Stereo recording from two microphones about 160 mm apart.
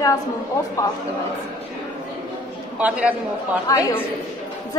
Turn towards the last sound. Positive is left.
turn(degrees=20)  # may be behind; listen again after turning